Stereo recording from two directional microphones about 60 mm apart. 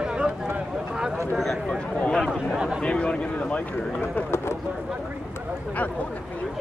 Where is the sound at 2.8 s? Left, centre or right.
Centre.